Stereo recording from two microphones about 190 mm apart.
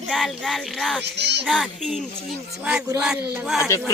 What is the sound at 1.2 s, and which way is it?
Speech, 60° right (ahead or behind).